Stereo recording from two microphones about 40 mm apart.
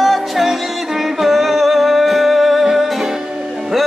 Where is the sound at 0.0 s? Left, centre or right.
Centre.